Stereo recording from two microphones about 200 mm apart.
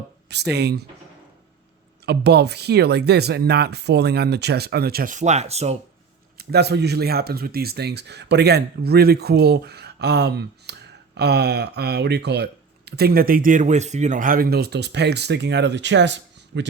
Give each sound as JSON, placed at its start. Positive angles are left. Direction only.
{"t": 0.3, "sound": "speech", "side_deg": -55}
{"t": 2.0, "sound": "speech", "side_deg": -55}
{"t": 6.3, "sound": "speech", "side_deg": -55}